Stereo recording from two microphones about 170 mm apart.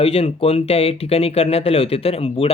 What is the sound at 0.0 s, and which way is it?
Speech, 35° left (ahead or behind).